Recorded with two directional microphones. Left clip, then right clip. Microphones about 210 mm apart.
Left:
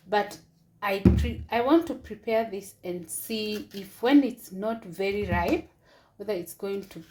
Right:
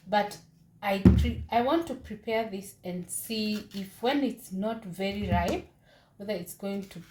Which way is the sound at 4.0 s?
35° left (ahead or behind).